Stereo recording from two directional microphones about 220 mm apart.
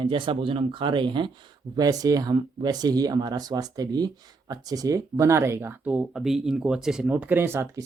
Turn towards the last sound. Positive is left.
turn(degrees=-10)  # may be behind; listen again after turning